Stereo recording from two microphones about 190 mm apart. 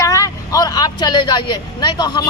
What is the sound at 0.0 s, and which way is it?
Vehicle, 20° left (ahead or behind).